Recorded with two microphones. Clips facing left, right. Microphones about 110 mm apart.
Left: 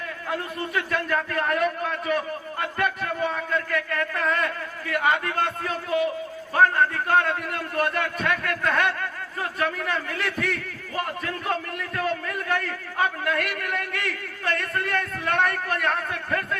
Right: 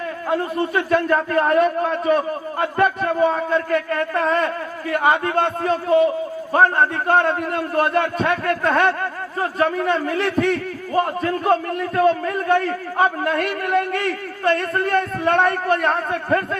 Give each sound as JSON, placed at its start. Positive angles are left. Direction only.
{"t": 0.3, "sound": "a man's voice", "side_deg": -35}